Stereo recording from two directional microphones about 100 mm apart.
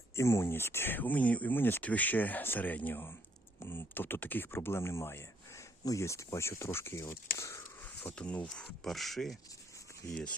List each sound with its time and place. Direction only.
0.2 s speech: 30° left (ahead or behind)
7.9 s speech: 15° left (ahead or behind)